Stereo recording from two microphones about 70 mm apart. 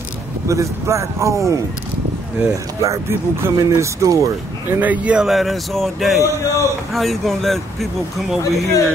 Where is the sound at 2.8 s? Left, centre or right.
Right.